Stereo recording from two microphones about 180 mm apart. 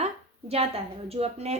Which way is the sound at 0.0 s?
35° right (ahead or behind).